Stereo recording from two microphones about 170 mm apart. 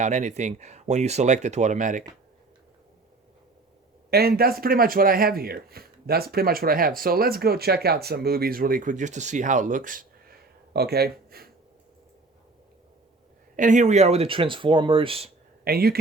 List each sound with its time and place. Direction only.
0.0 s speech: 45° right (ahead or behind)
4.1 s speech: 65° right (ahead or behind)
10.8 s speech: 70° right (ahead or behind)
13.6 s speech: 45° right (ahead or behind)
15.6 s speech: 65° right (ahead or behind)